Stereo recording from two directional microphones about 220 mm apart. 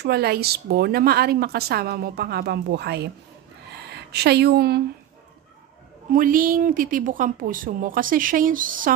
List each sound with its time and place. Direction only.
0.0 s a woman's voice: 45° right (ahead or behind)
6.1 s a woman's voice: 40° right (ahead or behind)